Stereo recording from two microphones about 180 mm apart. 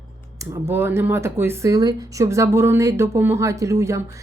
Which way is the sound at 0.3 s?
15° right (ahead or behind).